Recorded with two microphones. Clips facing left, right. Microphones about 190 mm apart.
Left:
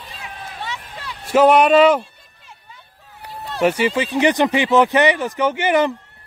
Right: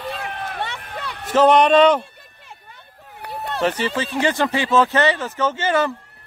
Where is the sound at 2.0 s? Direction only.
60° right (ahead or behind).